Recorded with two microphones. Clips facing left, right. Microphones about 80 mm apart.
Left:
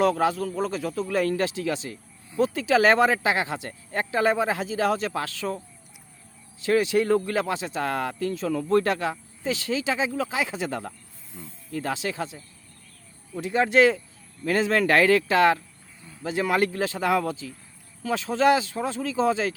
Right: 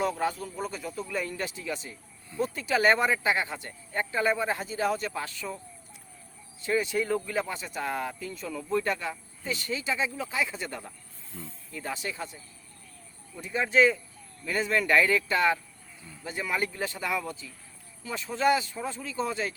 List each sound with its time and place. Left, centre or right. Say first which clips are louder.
0.0 s speech: left 7 dB; left
6.6 s speech: left 6 dB; left
11.3 s speech: even; centre
11.7 s speech: left 7 dB; left
14.4 s speech: left 5 dB; left